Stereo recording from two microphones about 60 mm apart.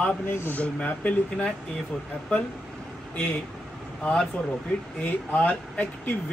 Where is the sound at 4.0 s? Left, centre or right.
Centre.